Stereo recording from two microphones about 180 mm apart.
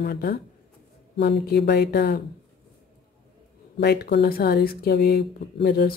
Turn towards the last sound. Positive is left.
turn(degrees=60)  # may be behind; listen again after turning